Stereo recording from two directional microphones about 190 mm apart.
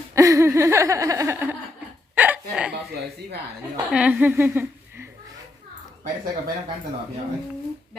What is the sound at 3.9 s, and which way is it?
A woman's voice, 5° right (ahead or behind).